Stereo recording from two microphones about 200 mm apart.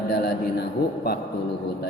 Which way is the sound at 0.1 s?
55° left (ahead or behind).